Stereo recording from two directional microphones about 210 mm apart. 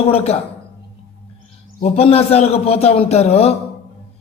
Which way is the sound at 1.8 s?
30° left (ahead or behind).